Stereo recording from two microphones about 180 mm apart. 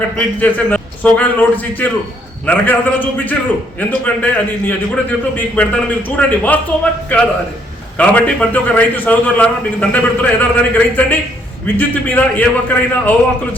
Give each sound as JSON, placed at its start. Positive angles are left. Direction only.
{"t": 0.2, "sound": "a man's voice", "side_deg": 10}